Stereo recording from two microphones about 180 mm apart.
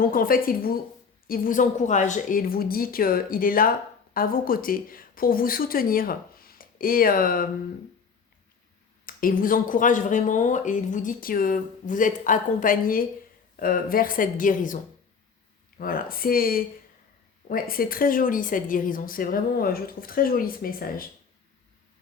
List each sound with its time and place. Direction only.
0.0 s speech: 55° left (ahead or behind)
9.0 s speech: 50° left (ahead or behind)
15.8 s speech: 55° left (ahead or behind)